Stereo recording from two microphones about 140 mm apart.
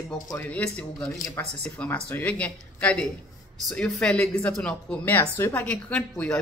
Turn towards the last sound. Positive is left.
turn(degrees=10)  # may be behind; listen again after turning